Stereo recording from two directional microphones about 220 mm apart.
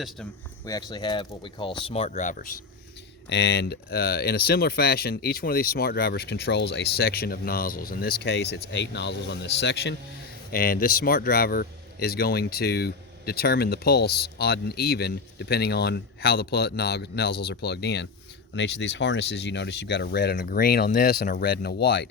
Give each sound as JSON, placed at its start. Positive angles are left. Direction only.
{"t": 0.6, "sound": "speech", "side_deg": 15}
{"t": 3.2, "sound": "speech", "side_deg": 55}